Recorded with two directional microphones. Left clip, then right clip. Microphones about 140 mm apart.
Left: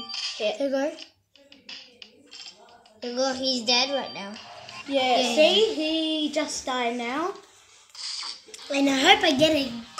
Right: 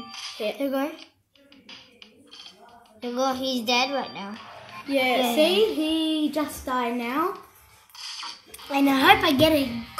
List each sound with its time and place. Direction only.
0.0 s speech: 5° right (ahead or behind)
3.0 s a child's voice: 5° right (ahead or behind)
7.9 s a sound: 5° left (ahead or behind)
8.8 s a woman's voice: 45° right (ahead or behind)